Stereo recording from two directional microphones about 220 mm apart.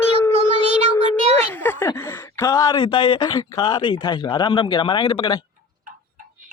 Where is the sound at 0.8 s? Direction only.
30° right (ahead or behind).